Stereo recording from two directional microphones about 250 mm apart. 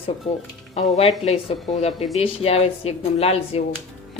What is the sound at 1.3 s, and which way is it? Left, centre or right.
Speech, left.